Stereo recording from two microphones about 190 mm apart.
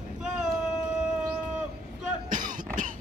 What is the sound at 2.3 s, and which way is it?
Cough, 45° right (ahead or behind).